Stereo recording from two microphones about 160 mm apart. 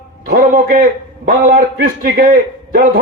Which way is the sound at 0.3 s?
70° right (ahead or behind).